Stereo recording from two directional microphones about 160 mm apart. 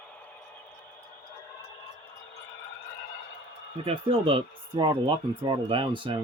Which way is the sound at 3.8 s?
35° right (ahead or behind).